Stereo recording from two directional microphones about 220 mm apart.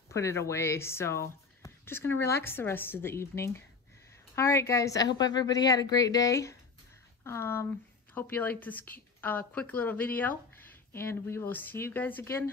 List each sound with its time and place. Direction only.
0.1 s speech: 10° left (ahead or behind)